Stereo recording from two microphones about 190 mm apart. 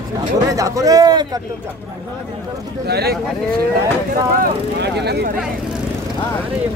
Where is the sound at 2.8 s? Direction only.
55° right (ahead or behind).